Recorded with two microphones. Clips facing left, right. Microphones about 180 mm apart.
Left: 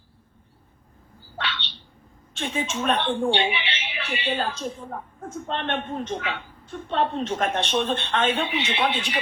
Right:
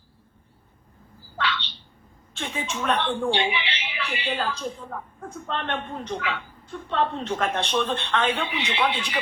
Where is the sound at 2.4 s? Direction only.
25° left (ahead or behind).